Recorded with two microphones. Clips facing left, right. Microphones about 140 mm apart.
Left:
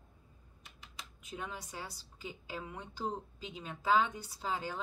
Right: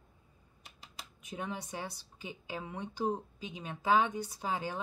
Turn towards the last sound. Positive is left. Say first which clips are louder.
# right 2 dB
turn(degrees=-15)  # may be behind; listen again after turning